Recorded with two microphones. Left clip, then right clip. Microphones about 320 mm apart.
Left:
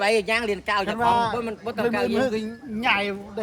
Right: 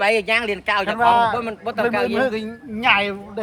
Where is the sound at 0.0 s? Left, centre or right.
Centre.